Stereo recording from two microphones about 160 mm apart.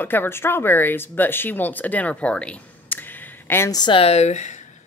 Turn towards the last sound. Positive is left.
turn(degrees=45)  # may be behind; listen again after turning